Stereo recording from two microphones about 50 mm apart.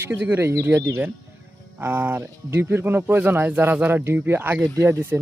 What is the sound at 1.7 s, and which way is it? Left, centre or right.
Speech, right.